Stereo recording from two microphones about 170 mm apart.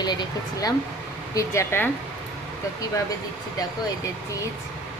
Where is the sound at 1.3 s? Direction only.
15° left (ahead or behind).